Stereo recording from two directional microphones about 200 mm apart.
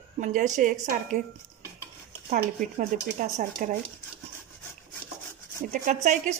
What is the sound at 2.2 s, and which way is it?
Speech, 35° right (ahead or behind).